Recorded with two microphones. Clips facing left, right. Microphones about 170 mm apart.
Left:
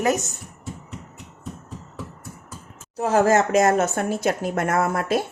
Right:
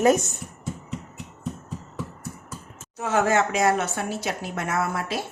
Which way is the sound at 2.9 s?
35° left (ahead or behind).